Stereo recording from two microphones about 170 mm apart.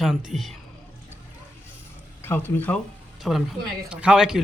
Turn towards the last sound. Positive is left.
turn(degrees=-5)  # may be behind; listen again after turning